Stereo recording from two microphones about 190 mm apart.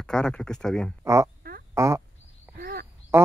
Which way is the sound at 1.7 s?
15° right (ahead or behind).